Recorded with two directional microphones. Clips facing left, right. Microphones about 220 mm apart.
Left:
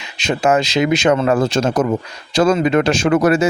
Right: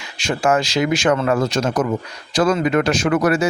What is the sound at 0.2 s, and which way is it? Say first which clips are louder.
Speech: left 2 dB; 20° left (ahead or behind).